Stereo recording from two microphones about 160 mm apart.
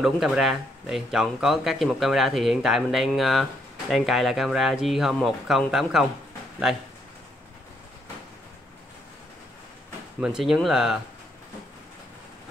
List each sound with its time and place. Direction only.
0.0 s speech: centre (ahead or behind)
10.2 s speech: 5° right (ahead or behind)